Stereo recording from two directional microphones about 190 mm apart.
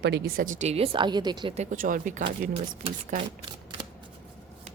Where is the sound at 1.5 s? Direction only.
40° right (ahead or behind).